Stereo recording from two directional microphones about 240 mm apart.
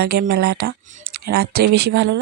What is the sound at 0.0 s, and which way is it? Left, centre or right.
Speech, right.